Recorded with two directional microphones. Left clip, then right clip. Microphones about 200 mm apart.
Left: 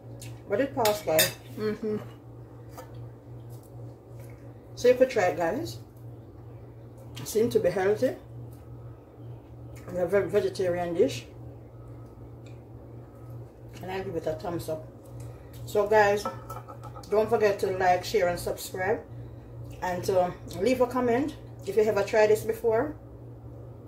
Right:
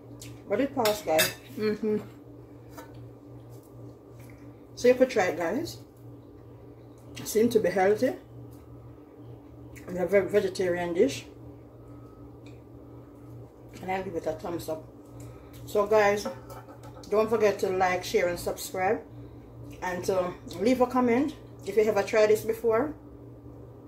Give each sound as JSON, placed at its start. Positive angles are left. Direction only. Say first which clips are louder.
{"t": 0.5, "sound": "speech", "louder": "left 1 dB", "side_deg": -10}
{"t": 4.8, "sound": "speech", "louder": "left 1 dB", "side_deg": -10}
{"t": 7.2, "sound": "speech", "louder": "right 1 dB", "side_deg": -15}
{"t": 9.9, "sound": "speech", "louder": "right 1 dB", "side_deg": -15}
{"t": 13.8, "sound": "speech", "louder": "right 1 dB", "side_deg": -10}
{"t": 15.7, "sound": "speech", "louder": "left 1 dB", "side_deg": -10}